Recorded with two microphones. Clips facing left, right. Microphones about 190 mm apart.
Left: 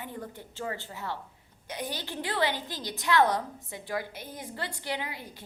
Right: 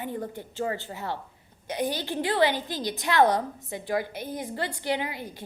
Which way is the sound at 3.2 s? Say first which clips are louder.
Right 5 dB; 40° right (ahead or behind).